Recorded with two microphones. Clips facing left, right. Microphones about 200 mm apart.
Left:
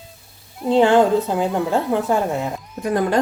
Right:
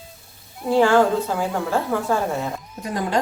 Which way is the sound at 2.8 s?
55° left (ahead or behind).